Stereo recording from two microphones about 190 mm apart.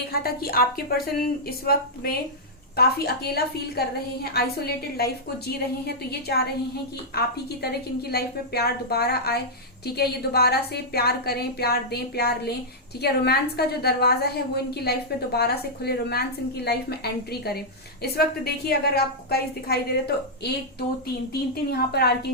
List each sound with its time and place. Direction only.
0.1 s a woman's voice: 55° left (ahead or behind)